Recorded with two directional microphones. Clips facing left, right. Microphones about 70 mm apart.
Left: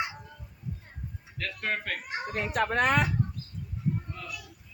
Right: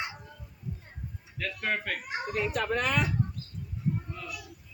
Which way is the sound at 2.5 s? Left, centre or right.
Left.